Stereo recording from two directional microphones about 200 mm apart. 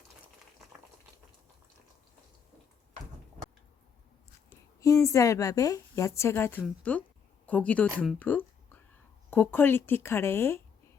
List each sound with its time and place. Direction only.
4.8 s a woman's voice: 15° left (ahead or behind)